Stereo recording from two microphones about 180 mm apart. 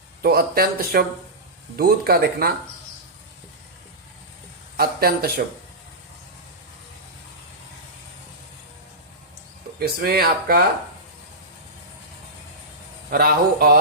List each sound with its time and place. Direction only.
0.2 s speech: 55° right (ahead or behind)
4.8 s speech: 60° right (ahead or behind)
9.7 s speech: 60° right (ahead or behind)
13.1 s speech: 60° right (ahead or behind)